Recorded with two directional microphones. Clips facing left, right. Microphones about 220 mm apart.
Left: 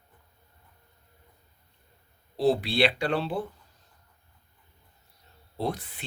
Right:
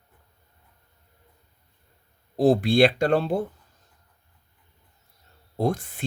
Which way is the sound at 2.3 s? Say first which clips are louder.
Right 6 dB; 45° right (ahead or behind).